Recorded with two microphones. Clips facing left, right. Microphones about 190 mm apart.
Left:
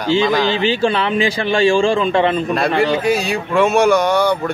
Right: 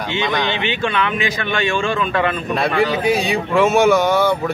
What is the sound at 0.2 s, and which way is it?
Speech, centre (ahead or behind).